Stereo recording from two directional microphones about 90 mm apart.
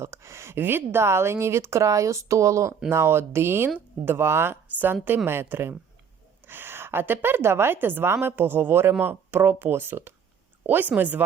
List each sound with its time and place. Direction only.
0.0 s a woman's voice: 30° right (ahead or behind)